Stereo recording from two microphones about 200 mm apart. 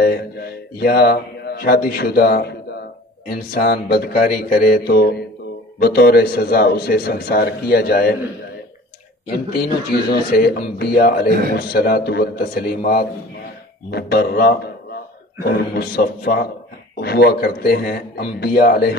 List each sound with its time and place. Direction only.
0.0 s speech: 50° left (ahead or behind)
9.3 s speech: 50° left (ahead or behind)
15.7 s speech: 50° left (ahead or behind)